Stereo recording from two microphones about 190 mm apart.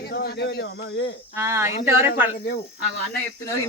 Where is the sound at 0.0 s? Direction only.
55° left (ahead or behind).